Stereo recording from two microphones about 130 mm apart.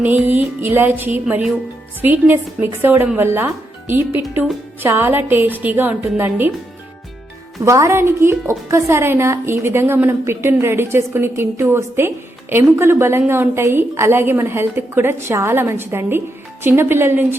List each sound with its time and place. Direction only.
0.0 s speech: 15° right (ahead or behind)
7.6 s a woman's voice: 25° right (ahead or behind)